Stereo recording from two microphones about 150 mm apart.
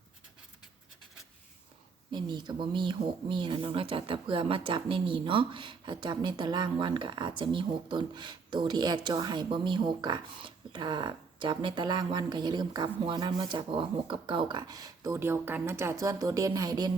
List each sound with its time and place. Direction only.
2.1 s speech: 30° right (ahead or behind)